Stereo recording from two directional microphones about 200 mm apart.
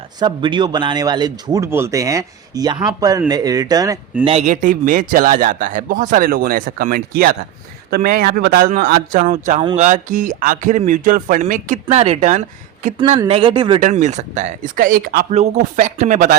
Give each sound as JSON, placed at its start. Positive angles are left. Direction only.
{"t": 0.2, "sound": "a man's voice", "side_deg": -20}
{"t": 4.2, "sound": "a man's voice", "side_deg": -30}
{"t": 13.7, "sound": "speech", "side_deg": -35}